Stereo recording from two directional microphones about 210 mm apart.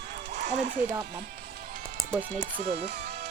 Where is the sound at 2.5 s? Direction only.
30° right (ahead or behind).